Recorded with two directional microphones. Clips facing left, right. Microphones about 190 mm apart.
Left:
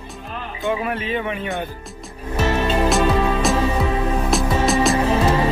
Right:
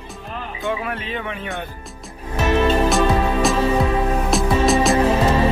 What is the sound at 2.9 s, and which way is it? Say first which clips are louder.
Music: even; centre (ahead or behind).